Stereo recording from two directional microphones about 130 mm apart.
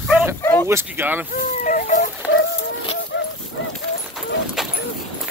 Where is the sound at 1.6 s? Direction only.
80° left.